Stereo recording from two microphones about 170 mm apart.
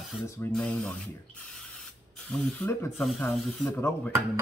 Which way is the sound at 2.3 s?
15° left (ahead or behind).